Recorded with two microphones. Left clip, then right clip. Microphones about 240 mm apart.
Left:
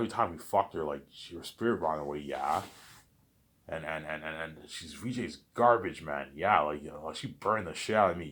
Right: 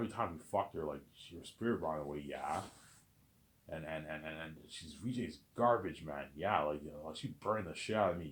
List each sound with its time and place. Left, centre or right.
0.1 s a man's voice: left
3.7 s a man's voice: left